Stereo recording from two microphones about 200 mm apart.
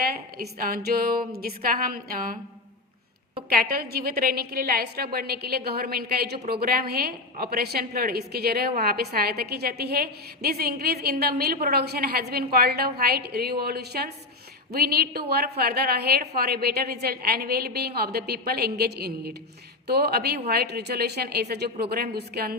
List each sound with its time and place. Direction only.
0.0 s a woman's voice: 50° right (ahead or behind)
3.5 s a woman's voice: 50° right (ahead or behind)